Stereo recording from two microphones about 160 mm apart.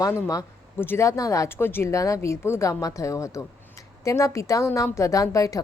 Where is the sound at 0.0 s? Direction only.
20° left (ahead or behind).